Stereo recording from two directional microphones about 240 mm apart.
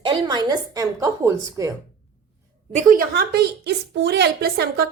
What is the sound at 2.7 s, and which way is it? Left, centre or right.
A woman's voice, right.